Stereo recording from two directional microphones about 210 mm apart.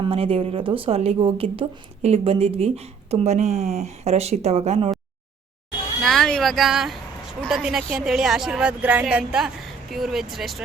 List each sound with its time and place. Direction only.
0.0 s a woman's voice: 25° right (ahead or behind)
6.0 s a woman's voice: centre (ahead or behind)